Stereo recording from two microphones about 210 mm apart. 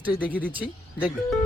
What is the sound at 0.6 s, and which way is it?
Speech, 5° right (ahead or behind).